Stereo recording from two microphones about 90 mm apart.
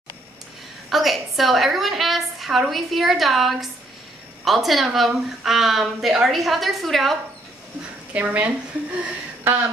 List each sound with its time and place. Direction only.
0.8 s a woman's voice: centre (ahead or behind)
8.1 s a woman's voice: 20° right (ahead or behind)